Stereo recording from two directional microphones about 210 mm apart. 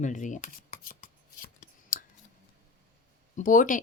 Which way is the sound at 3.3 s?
40° left (ahead or behind).